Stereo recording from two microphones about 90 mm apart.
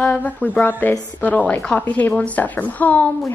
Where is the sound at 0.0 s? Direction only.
15° left (ahead or behind).